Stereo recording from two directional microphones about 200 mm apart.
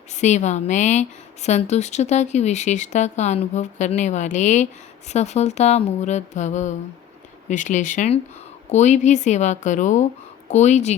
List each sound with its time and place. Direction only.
0.1 s a woman's voice: 35° left (ahead or behind)